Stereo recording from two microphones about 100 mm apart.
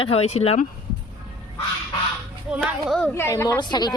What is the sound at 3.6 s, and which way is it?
Speech, 45° left (ahead or behind).